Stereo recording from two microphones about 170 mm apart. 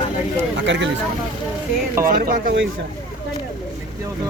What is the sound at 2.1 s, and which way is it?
Speech, 55° right (ahead or behind).